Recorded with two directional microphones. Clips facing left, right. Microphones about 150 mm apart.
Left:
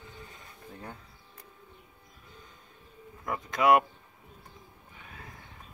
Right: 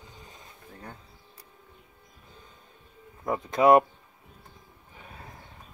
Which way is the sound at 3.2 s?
30° right (ahead or behind).